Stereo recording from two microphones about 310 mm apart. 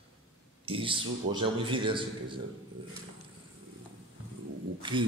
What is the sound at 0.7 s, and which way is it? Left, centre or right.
A man's voice, centre.